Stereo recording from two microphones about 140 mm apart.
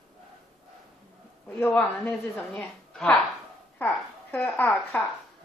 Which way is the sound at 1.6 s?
10° left (ahead or behind).